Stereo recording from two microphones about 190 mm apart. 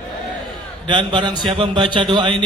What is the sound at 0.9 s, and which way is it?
A man's voice, 25° right (ahead or behind).